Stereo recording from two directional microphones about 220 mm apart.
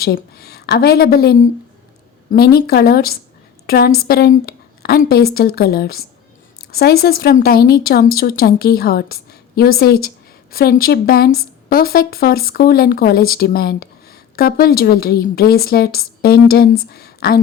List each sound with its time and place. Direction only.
0.0 s speech: 45° left (ahead or behind)